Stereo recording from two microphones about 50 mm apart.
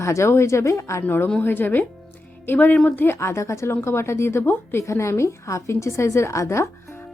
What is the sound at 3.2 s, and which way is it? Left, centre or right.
A woman's voice, left.